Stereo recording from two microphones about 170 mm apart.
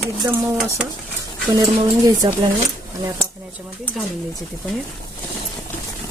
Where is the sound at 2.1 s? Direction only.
25° right (ahead or behind).